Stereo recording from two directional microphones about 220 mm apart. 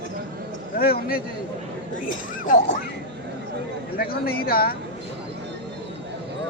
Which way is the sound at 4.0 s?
45° left (ahead or behind).